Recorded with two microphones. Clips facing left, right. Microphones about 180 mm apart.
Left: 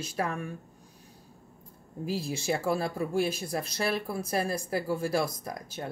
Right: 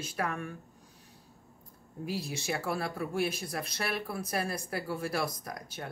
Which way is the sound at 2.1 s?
25° left (ahead or behind).